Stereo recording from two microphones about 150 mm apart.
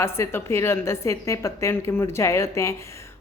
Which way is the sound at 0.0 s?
15° left (ahead or behind).